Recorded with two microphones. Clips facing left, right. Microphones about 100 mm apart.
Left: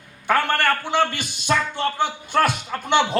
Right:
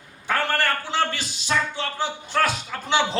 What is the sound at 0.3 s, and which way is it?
A man's voice, 60° left (ahead or behind).